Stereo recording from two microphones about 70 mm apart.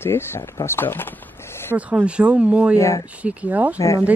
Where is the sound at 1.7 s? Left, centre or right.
Centre.